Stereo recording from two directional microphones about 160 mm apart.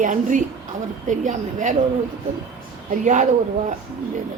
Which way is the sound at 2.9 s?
55° right (ahead or behind).